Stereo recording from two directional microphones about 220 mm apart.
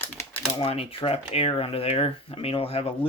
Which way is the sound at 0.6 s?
25° left (ahead or behind).